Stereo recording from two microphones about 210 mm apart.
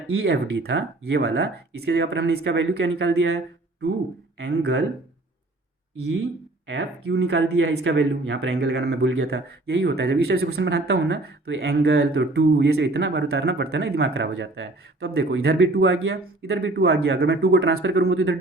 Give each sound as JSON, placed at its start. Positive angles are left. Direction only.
{"t": 0.2, "sound": "speech", "side_deg": -55}
{"t": 4.4, "sound": "speech", "side_deg": -55}
{"t": 6.7, "sound": "speech", "side_deg": -55}